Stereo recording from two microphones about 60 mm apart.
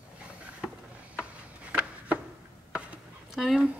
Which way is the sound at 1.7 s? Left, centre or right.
Right.